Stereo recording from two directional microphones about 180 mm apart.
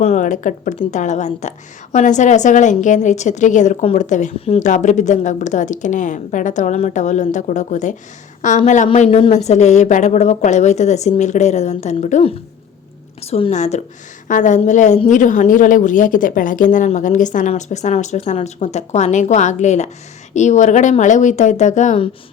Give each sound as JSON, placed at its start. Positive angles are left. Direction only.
{"t": 0.0, "sound": "a woman's voice", "side_deg": 45}
{"t": 9.0, "sound": "a woman's voice", "side_deg": 30}
{"t": 13.3, "sound": "a woman's voice", "side_deg": 35}